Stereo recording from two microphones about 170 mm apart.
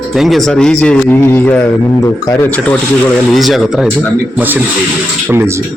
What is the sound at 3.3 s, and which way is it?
Speech, centre (ahead or behind).